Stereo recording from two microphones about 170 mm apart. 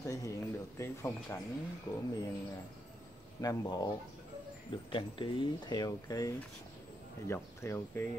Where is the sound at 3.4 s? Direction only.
20° left (ahead or behind).